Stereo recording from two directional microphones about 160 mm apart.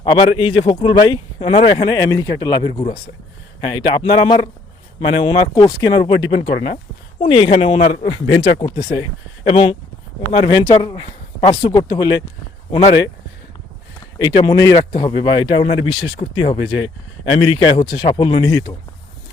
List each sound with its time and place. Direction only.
0.0 s speech: 30° left (ahead or behind)
1.8 s a man's voice: 25° left (ahead or behind); by 8.0 s 40° left (ahead or behind)
8.4 s a man's voice: 25° left (ahead or behind)
14.2 s a man's voice: 25° left (ahead or behind)